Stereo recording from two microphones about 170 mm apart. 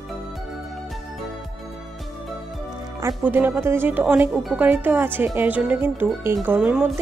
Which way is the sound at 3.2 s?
10° right (ahead or behind).